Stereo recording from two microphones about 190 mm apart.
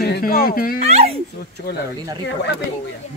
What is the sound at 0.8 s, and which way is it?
Speech, 35° right (ahead or behind).